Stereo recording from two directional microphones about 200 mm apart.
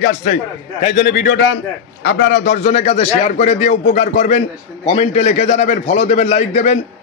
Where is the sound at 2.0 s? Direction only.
55° left (ahead or behind).